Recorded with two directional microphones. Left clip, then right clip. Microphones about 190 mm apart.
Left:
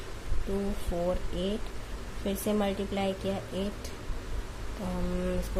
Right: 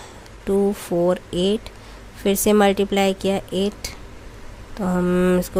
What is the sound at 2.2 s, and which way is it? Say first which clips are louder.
A woman's voice: right 14 dB; 55° right (ahead or behind).